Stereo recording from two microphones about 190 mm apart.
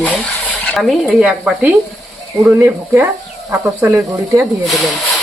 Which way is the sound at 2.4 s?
10° right (ahead or behind).